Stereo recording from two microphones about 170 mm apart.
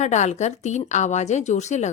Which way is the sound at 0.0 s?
45° left (ahead or behind).